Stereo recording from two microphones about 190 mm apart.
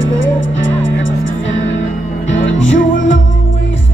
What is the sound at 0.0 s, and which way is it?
Music, 85° left.